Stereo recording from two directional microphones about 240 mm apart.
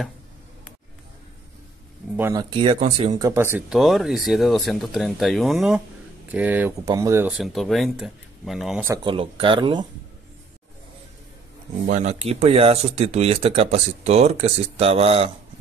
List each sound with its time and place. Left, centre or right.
2.1 s speech: centre
2.5 s speech: right; by 8.9 s centre
8.9 s speech: right
11.9 s speech: right